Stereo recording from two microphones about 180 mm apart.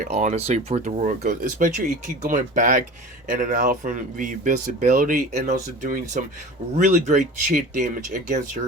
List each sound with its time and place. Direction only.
0.0 s speech: 40° right (ahead or behind)